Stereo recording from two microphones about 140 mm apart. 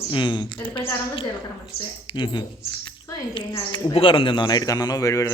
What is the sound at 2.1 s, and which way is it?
Speech, 35° left (ahead or behind).